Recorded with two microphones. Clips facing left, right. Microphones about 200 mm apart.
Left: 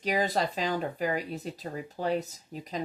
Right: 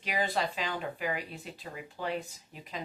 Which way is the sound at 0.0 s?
40° left (ahead or behind).